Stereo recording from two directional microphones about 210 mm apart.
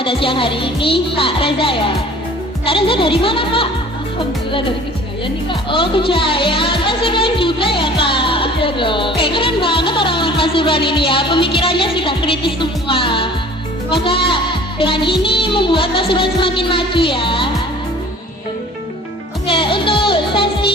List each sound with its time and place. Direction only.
0.0 s speech: 25° left (ahead or behind)
5.5 s speech: 25° left (ahead or behind)
19.5 s music: 25° left (ahead or behind)